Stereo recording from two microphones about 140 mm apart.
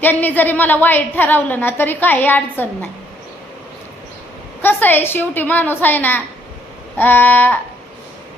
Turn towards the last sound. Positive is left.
turn(degrees=15)  # may be behind; listen again after turning